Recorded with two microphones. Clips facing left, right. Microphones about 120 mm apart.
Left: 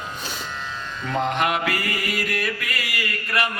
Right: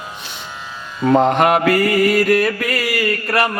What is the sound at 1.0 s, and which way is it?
Mantra, 45° right (ahead or behind).